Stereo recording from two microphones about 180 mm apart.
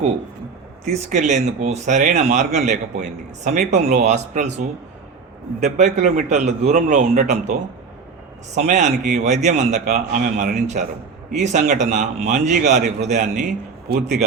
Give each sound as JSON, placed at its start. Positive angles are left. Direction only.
{"t": 0.9, "sound": "a man's voice", "side_deg": -40}